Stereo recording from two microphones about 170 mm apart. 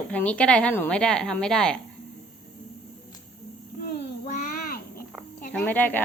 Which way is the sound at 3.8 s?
50° left (ahead or behind).